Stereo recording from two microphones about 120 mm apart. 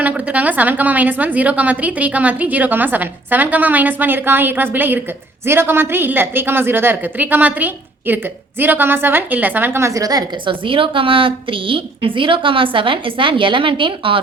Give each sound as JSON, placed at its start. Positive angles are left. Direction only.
{"t": 0.0, "sound": "a woman's voice", "side_deg": -10}